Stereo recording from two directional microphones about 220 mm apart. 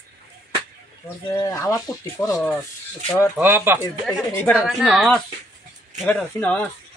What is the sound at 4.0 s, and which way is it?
A woman's voice, 5° left (ahead or behind).